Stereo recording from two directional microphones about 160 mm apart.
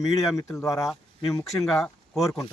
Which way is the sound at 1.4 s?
Centre (ahead or behind).